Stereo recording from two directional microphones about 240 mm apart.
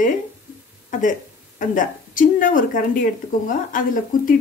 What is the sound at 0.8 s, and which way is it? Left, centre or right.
Speech, left.